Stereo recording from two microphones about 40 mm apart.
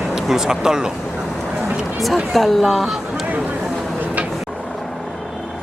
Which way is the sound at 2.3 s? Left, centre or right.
Centre.